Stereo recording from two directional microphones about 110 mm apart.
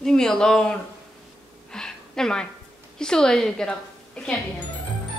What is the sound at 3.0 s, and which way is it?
A woman's voice, 5° left (ahead or behind).